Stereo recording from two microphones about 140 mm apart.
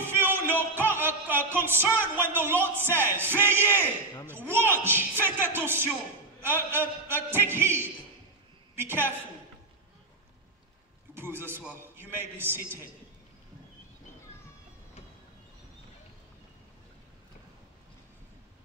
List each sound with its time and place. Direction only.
0.0 s music: 15° right (ahead or behind)
2.1 s a woman's voice: 15° right (ahead or behind)
11.1 s speech: 15° right (ahead or behind)